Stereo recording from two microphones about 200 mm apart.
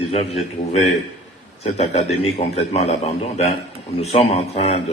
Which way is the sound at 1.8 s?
35° left (ahead or behind).